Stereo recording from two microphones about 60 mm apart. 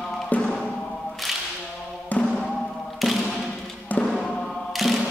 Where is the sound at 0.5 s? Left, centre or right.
Centre.